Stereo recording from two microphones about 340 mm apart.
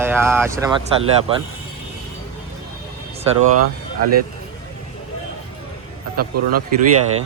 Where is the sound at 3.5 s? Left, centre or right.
Right.